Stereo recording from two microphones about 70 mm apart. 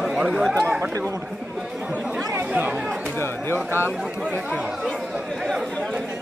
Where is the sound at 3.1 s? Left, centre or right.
Left.